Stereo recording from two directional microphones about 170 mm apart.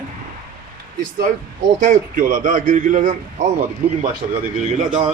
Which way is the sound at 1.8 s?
50° right (ahead or behind).